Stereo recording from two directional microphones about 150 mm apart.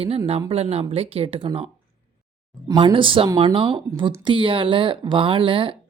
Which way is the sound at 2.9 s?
35° right (ahead or behind).